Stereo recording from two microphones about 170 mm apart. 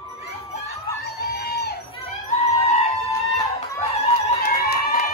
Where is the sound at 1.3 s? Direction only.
70° left (ahead or behind).